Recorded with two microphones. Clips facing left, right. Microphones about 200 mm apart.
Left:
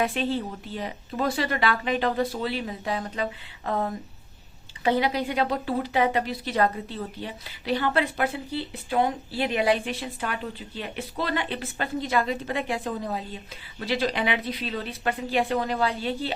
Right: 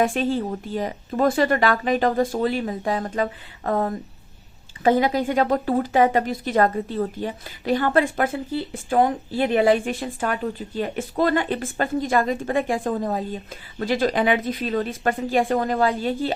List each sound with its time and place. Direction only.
0.0 s speech: 45° right (ahead or behind)